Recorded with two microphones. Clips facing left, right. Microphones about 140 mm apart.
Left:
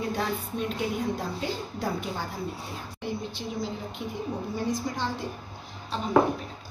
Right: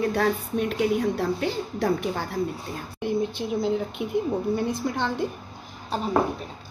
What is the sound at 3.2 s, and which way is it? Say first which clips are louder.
A woman's voice: right 8 dB; 60° right (ahead or behind).